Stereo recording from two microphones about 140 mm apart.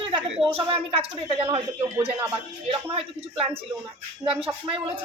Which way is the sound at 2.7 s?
40° right (ahead or behind).